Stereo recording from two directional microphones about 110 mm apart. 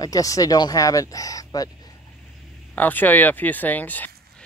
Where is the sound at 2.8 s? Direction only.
15° left (ahead or behind).